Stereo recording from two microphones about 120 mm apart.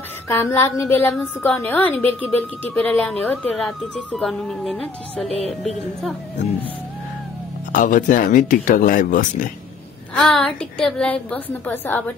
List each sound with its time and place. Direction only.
0.3 s a woman's voice: 20° left (ahead or behind)
3.2 s speech: centre (ahead or behind)
7.8 s speech: 90° left
10.1 s a woman's voice: 5° left (ahead or behind)